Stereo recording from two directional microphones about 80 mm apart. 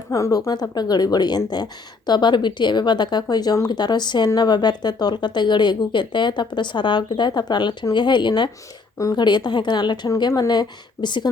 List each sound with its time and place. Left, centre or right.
0.1 s a woman's voice: left